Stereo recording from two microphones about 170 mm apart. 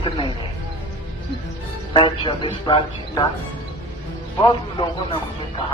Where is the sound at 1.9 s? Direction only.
30° left (ahead or behind).